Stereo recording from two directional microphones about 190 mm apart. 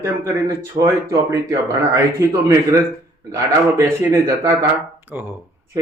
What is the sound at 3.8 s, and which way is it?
Speech, 15° right (ahead or behind).